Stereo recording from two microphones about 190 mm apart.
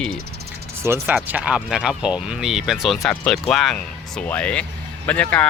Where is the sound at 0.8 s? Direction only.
15° right (ahead or behind); by 5.4 s 5° left (ahead or behind).